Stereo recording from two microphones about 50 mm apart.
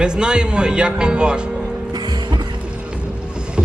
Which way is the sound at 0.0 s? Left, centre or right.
Centre.